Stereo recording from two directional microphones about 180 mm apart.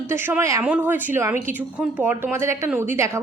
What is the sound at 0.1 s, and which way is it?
A woman's voice, 15° right (ahead or behind).